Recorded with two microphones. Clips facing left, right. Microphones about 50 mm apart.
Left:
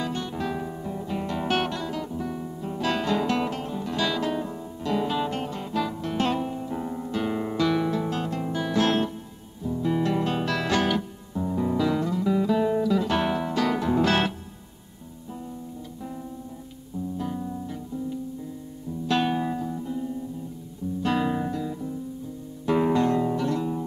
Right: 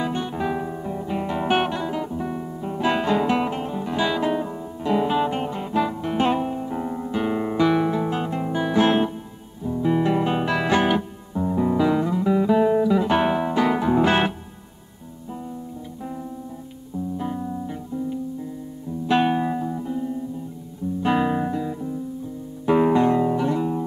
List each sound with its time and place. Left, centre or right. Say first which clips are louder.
0.0 s music: right 4 dB; centre
17.2 s music: right 3 dB; centre